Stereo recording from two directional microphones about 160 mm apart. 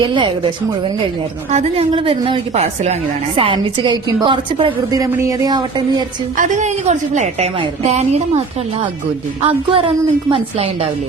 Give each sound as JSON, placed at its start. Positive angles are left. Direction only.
{"t": 0.0, "sound": "a woman's voice", "side_deg": -30}
{"t": 1.5, "sound": "a woman's voice", "side_deg": -35}
{"t": 6.3, "sound": "a woman's voice", "side_deg": -50}